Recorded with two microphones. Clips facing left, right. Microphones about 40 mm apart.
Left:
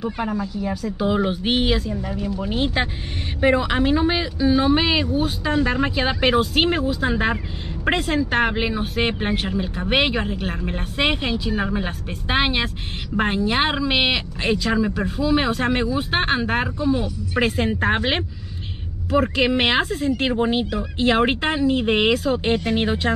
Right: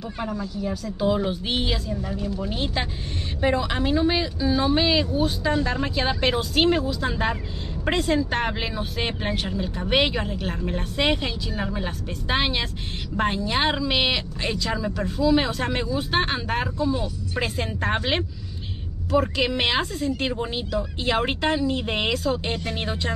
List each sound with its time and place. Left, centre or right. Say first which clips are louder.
0.0 s speech: left 5 dB; left